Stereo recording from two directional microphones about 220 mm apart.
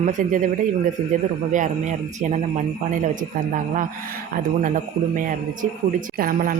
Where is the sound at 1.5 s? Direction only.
35° right (ahead or behind).